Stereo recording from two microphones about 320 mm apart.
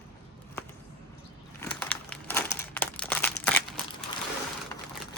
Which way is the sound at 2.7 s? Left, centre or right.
Centre.